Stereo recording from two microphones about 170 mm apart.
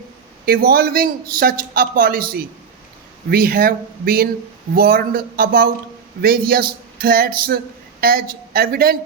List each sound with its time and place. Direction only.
0.4 s a man's voice: 60° right (ahead or behind)